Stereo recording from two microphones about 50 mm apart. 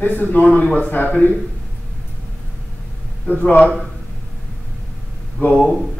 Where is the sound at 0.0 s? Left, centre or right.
Left.